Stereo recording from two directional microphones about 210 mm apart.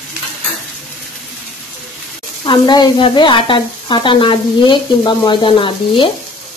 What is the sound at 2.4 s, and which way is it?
Speech, 20° left (ahead or behind).